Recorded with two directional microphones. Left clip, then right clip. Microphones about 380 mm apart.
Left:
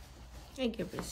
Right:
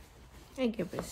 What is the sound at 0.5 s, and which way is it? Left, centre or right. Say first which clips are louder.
Speech: right 3 dB; centre.